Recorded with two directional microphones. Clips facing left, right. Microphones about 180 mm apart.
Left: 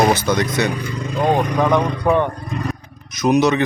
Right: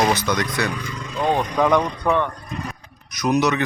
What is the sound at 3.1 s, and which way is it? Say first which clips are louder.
Speech: left 4 dB; 25° left (ahead or behind).